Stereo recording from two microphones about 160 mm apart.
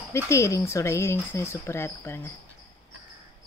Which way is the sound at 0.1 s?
20° left (ahead or behind).